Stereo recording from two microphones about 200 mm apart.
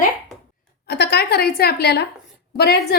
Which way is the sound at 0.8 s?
55° left (ahead or behind).